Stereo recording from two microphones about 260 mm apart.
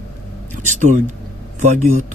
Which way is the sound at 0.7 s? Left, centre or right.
Right.